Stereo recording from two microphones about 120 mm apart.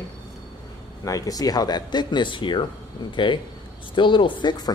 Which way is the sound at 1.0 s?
30° left (ahead or behind).